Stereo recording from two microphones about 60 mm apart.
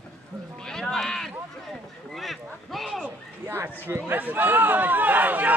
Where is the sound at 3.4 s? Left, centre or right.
Right.